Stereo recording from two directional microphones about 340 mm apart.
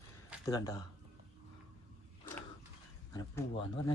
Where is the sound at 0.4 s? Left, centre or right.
Centre.